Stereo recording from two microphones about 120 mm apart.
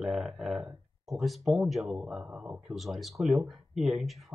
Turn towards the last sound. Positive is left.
turn(degrees=0)  # may be behind; listen again after turning